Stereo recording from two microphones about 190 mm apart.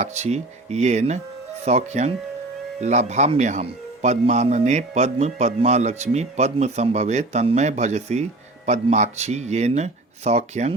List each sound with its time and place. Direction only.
0.0 s a man's voice: 35° right (ahead or behind)